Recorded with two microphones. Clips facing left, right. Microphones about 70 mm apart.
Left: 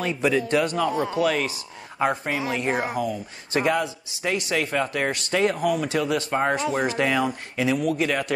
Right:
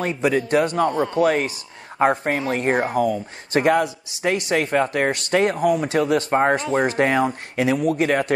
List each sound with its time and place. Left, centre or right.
0.0 s a man's voice: right
0.9 s speech: centre
1.2 s speech: right